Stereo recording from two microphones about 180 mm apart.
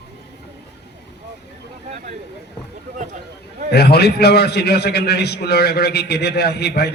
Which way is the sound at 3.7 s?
65° left (ahead or behind).